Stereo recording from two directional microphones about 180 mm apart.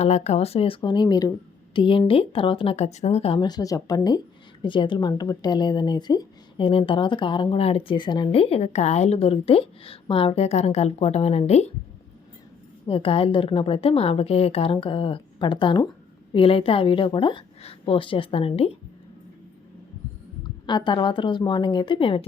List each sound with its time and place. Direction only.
0.0 s a woman's voice: 40° left (ahead or behind)
12.8 s a woman's voice: 30° left (ahead or behind)
20.7 s speech: 25° left (ahead or behind)